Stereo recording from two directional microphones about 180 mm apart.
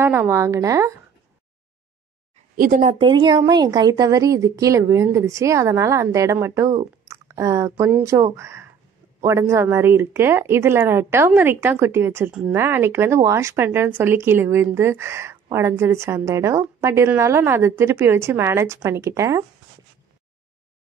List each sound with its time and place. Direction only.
0.0 s a woman's voice: 15° right (ahead or behind)
2.5 s speech: 50° right (ahead or behind)
3.0 s a woman's voice: 25° right (ahead or behind)